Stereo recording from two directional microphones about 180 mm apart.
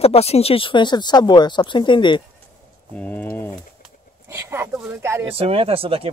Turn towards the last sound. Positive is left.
turn(degrees=-30)  # may be behind; listen again after turning